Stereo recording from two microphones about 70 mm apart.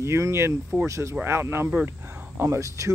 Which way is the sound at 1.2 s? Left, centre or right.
Right.